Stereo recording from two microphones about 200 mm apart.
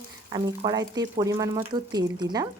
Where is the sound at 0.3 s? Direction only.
20° right (ahead or behind).